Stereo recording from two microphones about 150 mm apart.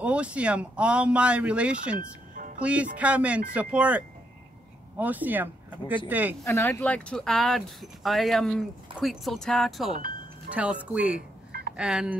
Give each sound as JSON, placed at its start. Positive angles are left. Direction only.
{"t": 0.0, "sound": "speech", "side_deg": -10}
{"t": 2.0, "sound": "music", "side_deg": -60}
{"t": 2.6, "sound": "speech", "side_deg": -10}
{"t": 6.4, "sound": "speech", "side_deg": 20}
{"t": 6.8, "sound": "speech", "side_deg": 5}